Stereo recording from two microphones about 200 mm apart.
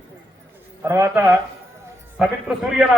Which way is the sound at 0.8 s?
15° right (ahead or behind).